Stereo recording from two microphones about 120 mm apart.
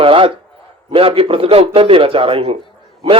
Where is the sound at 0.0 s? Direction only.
50° right (ahead or behind).